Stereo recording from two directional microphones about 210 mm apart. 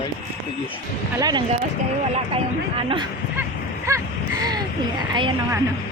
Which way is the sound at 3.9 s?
15° right (ahead or behind).